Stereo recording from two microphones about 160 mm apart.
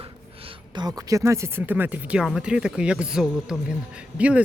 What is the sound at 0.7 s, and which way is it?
Speech, 25° right (ahead or behind).